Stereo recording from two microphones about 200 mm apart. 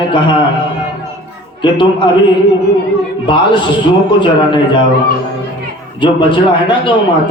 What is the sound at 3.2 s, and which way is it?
A man's voice, 25° left (ahead or behind).